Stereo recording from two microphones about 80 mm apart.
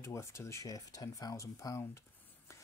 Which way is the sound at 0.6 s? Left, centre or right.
Left.